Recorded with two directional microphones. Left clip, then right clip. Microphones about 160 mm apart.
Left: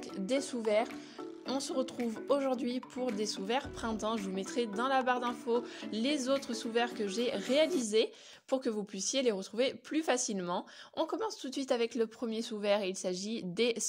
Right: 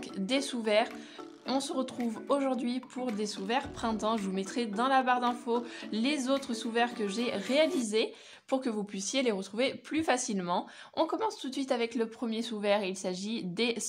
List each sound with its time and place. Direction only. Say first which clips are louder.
0.3 s speech: right 2 dB; 35° left (ahead or behind)